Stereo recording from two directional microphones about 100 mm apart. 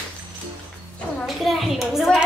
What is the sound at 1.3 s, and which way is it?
Speech, centre (ahead or behind).